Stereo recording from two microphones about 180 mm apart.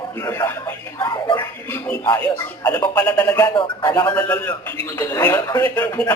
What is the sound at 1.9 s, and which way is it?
A man's voice, 10° left (ahead or behind).